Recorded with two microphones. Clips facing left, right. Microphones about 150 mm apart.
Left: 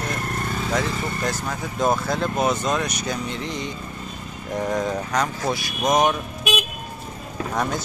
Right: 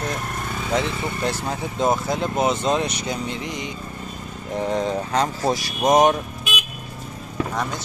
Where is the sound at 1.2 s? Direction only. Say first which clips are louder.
Right 2 dB; 30° right (ahead or behind).